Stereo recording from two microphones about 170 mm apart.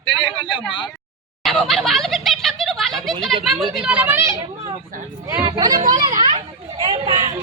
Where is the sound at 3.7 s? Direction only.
5° right (ahead or behind).